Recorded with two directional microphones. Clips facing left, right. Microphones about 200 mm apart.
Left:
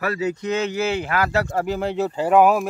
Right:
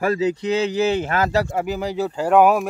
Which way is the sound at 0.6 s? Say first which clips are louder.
Right 3 dB; 15° right (ahead or behind).